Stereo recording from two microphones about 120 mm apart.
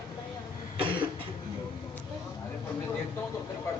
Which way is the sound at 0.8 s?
45° right (ahead or behind).